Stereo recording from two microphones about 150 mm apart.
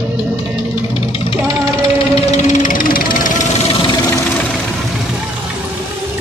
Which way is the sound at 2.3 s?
50° left (ahead or behind).